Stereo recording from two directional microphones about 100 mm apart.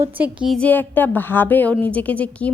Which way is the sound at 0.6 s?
15° left (ahead or behind).